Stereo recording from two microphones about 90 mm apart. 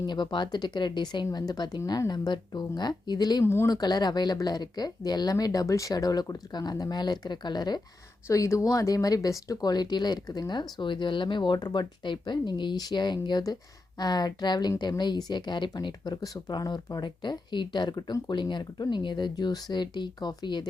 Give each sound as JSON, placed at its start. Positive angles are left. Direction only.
{"t": 0.0, "sound": "speech", "side_deg": 55}
{"t": 3.4, "sound": "speech", "side_deg": 30}
{"t": 3.7, "sound": "speech", "side_deg": 50}
{"t": 8.3, "sound": "speech", "side_deg": 35}